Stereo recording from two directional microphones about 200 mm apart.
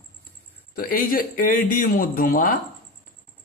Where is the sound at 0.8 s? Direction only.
45° left (ahead or behind).